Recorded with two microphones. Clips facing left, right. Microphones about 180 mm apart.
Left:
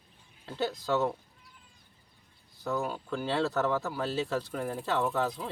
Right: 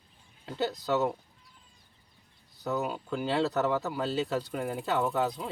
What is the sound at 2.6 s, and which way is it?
Speech, 5° right (ahead or behind).